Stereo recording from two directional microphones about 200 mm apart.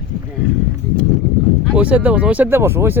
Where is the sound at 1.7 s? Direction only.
5° right (ahead or behind).